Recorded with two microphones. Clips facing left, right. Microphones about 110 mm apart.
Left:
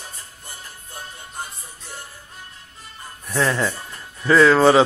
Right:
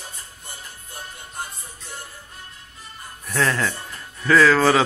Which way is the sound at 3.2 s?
15° left (ahead or behind).